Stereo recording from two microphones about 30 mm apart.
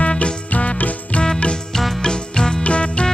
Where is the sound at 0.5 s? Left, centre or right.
Left.